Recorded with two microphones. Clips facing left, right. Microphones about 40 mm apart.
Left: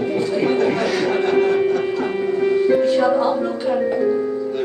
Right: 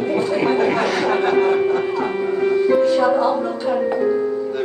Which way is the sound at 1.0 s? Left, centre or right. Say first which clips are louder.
Right 1 dB; right.